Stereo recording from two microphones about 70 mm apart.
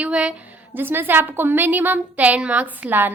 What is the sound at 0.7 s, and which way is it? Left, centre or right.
A woman's voice, right.